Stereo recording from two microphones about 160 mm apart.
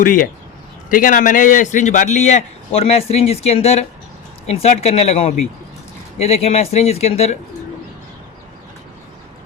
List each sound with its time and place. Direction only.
0.0 s a man's voice: 55° left (ahead or behind)